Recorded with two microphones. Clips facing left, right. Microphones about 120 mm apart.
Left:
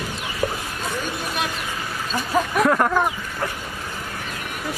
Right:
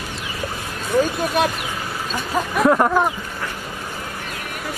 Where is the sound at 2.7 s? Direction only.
15° right (ahead or behind).